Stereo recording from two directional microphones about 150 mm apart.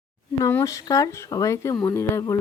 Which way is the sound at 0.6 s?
20° left (ahead or behind).